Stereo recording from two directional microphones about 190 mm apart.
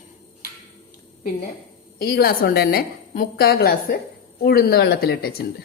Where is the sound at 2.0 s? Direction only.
55° left (ahead or behind).